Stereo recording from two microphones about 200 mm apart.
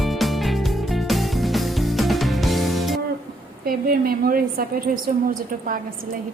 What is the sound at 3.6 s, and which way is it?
A woman's voice, 45° right (ahead or behind).